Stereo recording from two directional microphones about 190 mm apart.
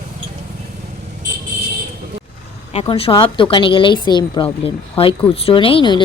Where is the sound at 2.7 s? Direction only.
30° left (ahead or behind).